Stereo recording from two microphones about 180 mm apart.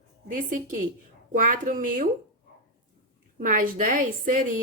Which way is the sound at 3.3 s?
50° right (ahead or behind).